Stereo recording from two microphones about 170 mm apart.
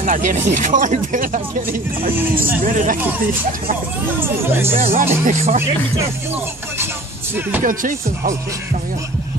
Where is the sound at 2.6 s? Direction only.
50° right (ahead or behind).